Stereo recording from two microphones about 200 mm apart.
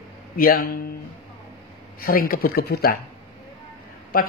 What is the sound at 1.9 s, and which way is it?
A man's voice, 45° left (ahead or behind).